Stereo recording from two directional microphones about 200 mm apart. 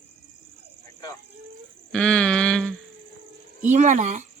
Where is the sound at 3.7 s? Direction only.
35° right (ahead or behind).